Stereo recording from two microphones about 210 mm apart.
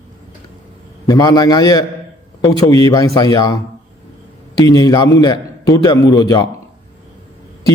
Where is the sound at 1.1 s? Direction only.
20° left (ahead or behind).